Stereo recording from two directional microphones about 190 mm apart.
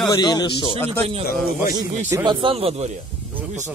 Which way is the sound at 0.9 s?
30° right (ahead or behind).